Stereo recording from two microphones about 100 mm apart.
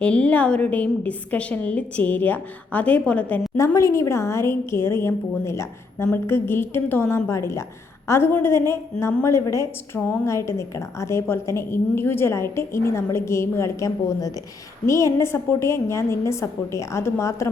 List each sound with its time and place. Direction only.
0.0 s a woman's voice: 10° left (ahead or behind)
3.8 s a woman's voice: 30° left (ahead or behind)